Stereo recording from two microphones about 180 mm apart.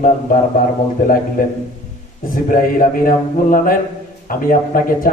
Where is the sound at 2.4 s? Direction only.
50° left (ahead or behind).